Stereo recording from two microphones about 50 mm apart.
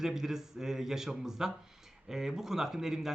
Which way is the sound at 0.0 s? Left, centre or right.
Centre.